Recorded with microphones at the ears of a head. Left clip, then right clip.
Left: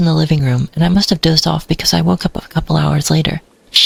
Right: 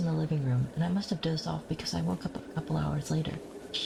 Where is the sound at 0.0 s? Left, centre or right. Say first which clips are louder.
Left 17 dB; left.